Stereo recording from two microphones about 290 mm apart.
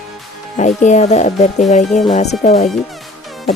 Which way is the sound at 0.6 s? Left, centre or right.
Left.